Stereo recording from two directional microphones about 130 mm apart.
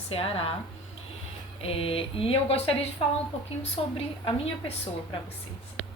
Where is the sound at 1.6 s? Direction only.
45° left (ahead or behind).